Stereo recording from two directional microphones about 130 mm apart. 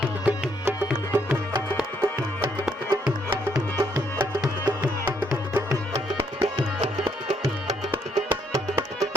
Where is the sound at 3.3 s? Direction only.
25° right (ahead or behind).